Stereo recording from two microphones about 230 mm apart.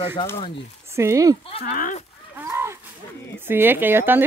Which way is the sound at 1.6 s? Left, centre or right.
Left.